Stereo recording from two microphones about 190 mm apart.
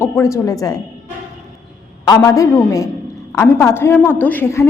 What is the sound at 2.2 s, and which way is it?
A woman's voice, 15° left (ahead or behind).